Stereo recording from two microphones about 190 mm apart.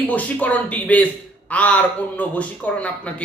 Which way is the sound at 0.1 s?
10° left (ahead or behind).